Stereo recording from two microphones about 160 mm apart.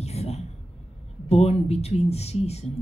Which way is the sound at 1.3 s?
40° left (ahead or behind).